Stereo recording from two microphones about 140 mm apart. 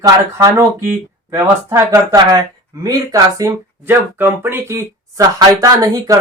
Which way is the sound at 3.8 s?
15° right (ahead or behind).